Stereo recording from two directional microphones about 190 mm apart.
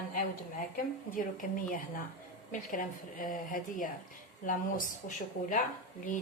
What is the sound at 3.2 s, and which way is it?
Speech, 45° left (ahead or behind).